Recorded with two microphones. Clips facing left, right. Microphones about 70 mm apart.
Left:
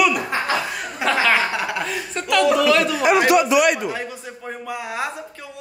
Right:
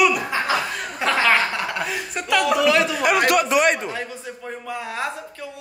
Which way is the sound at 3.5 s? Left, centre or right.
Right.